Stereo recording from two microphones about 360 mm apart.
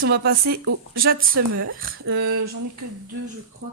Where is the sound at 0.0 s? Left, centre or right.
Right.